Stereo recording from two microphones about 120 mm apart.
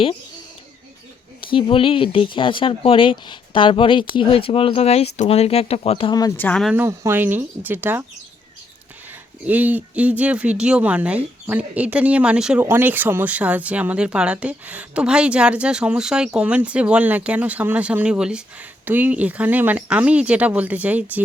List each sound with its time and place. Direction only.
1.4 s speech: 45° left (ahead or behind)
6.3 s speech: 15° left (ahead or behind)
6.7 s speech: 20° right (ahead or behind)
9.5 s speech: 15° right (ahead or behind)
12.5 s speech: 15° right (ahead or behind)